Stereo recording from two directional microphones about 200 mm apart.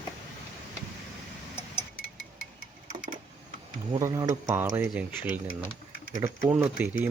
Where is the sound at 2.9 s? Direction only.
40° right (ahead or behind).